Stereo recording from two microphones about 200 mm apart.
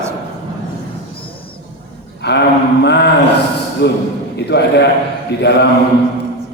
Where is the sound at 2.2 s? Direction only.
55° left (ahead or behind).